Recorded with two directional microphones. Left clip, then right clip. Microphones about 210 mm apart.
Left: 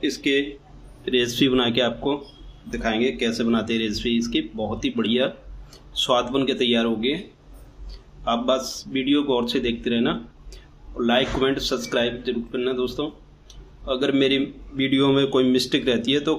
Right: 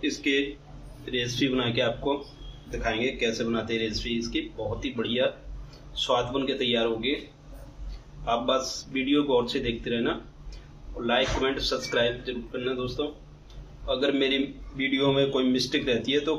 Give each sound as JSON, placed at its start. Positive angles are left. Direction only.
{"t": 0.0, "sound": "speech", "side_deg": 55}
{"t": 8.3, "sound": "speech", "side_deg": 55}